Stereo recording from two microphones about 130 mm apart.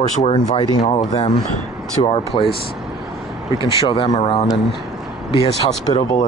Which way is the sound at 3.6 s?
40° left (ahead or behind).